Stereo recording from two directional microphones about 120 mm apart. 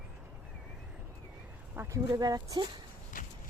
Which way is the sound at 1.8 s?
25° right (ahead or behind).